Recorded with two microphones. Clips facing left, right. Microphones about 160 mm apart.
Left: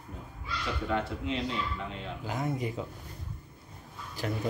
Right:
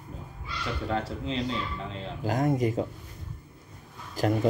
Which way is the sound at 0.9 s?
35° right (ahead or behind).